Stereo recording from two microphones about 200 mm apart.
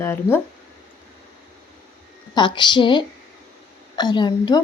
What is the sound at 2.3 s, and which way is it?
A woman's voice, 20° left (ahead or behind).